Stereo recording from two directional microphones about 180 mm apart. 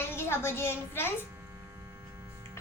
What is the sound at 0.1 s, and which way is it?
A woman's voice, 15° left (ahead or behind).